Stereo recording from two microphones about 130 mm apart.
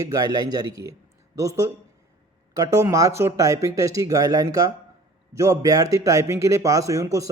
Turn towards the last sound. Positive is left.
turn(degrees=-25)  # may be behind; listen again after turning